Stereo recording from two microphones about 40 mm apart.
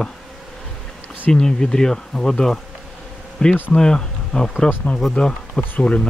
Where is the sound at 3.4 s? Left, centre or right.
Left.